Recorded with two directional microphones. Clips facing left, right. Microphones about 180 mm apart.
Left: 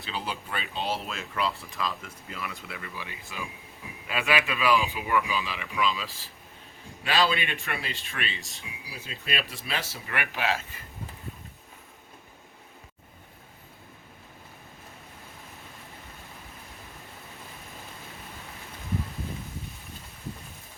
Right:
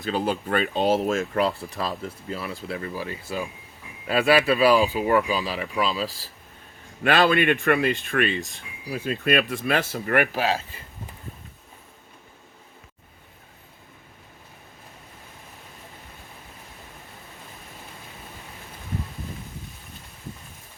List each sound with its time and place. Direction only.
0.0 s speech: 45° right (ahead or behind)
7.0 s speech: 55° right (ahead or behind)
10.3 s speech: 35° right (ahead or behind)